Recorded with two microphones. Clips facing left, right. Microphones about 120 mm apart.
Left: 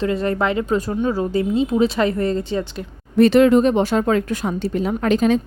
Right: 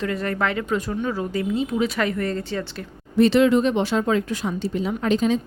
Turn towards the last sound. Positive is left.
turn(degrees=60)  # may be behind; listen again after turning